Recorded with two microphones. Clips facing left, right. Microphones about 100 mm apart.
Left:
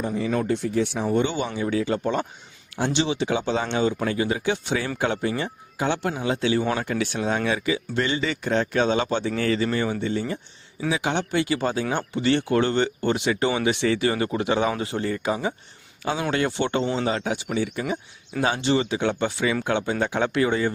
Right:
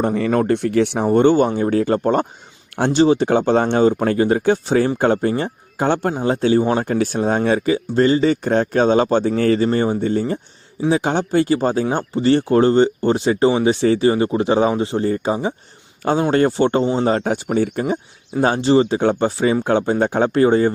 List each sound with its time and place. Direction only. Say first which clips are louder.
0.0 s speech: right 7 dB; 65° right (ahead or behind)
1.0 s speech: right 10 dB; 50° right (ahead or behind)
2.7 s speech: right 6 dB; 60° right (ahead or behind)
3.0 s speech: right 11 dB; 45° right (ahead or behind)
16.8 s speech: right 7 dB; 25° right (ahead or behind)
17.1 s speech: right 7 dB; 45° right (ahead or behind)